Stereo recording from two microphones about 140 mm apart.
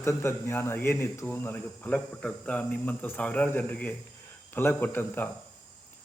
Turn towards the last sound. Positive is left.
turn(degrees=15)  # may be behind; listen again after turning